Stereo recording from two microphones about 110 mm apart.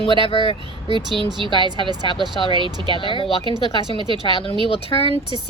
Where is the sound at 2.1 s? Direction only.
Centre (ahead or behind).